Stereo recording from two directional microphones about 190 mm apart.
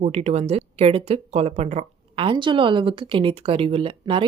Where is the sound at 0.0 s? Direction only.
35° right (ahead or behind).